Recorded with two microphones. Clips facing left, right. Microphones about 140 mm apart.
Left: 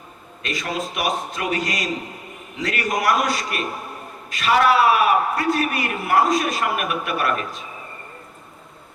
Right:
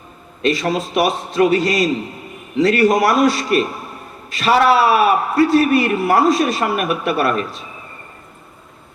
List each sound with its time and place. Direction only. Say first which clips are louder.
0.4 s a man's voice: right 9 dB; 30° right (ahead or behind)